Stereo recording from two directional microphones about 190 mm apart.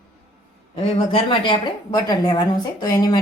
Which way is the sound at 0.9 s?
30° left (ahead or behind).